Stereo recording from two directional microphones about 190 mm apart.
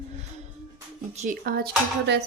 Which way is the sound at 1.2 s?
50° right (ahead or behind).